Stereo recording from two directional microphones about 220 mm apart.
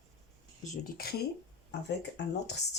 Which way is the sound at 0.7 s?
40° left (ahead or behind).